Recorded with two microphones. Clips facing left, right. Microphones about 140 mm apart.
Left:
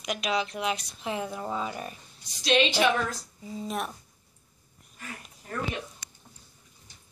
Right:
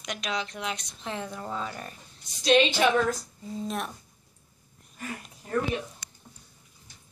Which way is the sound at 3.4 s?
5° left (ahead or behind).